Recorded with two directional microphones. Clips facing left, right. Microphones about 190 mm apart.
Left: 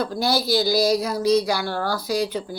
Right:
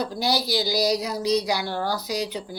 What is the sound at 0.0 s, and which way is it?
Speech, 15° right (ahead or behind).